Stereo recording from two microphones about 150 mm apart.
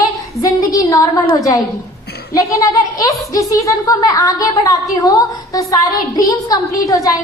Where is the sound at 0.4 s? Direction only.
25° left (ahead or behind).